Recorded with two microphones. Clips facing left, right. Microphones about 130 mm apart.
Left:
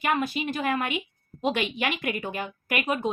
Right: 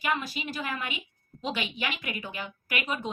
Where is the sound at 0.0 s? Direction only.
55° left (ahead or behind).